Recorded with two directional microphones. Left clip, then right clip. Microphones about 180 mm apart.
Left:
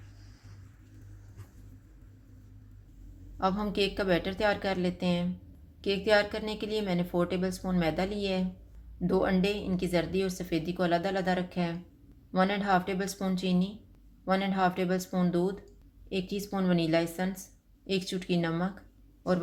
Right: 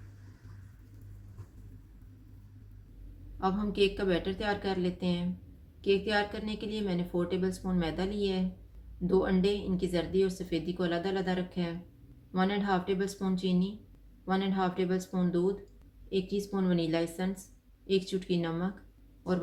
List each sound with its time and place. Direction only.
3.4 s speech: 40° left (ahead or behind)